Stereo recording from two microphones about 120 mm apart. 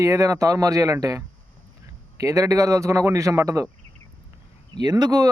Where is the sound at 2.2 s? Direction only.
25° right (ahead or behind).